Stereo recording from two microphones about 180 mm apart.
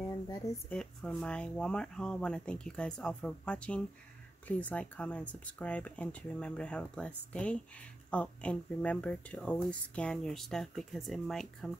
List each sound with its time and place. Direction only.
0.7 s speech: 5° left (ahead or behind)